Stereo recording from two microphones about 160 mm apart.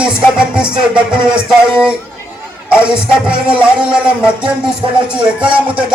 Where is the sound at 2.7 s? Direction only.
5° right (ahead or behind).